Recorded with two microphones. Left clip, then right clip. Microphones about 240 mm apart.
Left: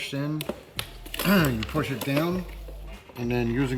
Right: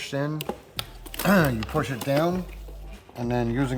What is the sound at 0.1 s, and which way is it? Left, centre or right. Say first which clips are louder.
Speech: right 2 dB; centre.